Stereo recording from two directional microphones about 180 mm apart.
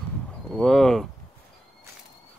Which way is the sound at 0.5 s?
Centre (ahead or behind).